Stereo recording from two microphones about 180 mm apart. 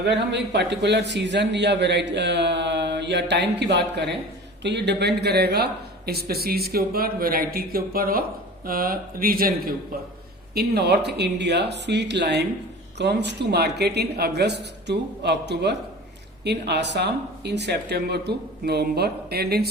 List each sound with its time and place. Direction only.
0.0 s a man's voice: 70° right (ahead or behind)